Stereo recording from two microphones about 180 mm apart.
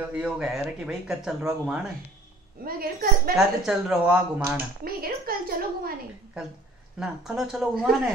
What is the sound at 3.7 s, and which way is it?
Speech, 5° right (ahead or behind).